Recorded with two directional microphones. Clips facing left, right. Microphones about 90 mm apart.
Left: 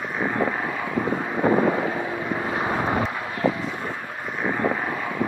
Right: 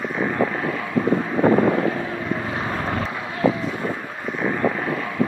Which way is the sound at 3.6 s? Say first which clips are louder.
Right 4 dB; 5° left (ahead or behind).